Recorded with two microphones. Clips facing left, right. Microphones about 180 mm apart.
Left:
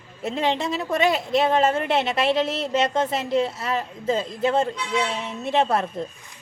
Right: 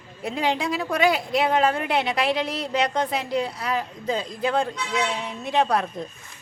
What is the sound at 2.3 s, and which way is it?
Speech, 25° left (ahead or behind).